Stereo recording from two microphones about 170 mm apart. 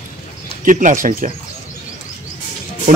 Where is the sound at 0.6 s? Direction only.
50° right (ahead or behind).